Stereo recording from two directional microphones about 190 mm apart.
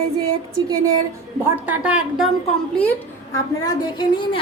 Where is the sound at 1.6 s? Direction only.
5° right (ahead or behind).